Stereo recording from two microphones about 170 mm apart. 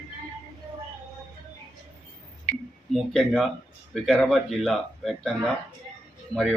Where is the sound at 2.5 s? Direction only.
40° left (ahead or behind).